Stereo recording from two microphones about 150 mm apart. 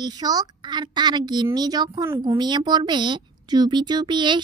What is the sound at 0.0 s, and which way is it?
A woman's voice, 25° right (ahead or behind).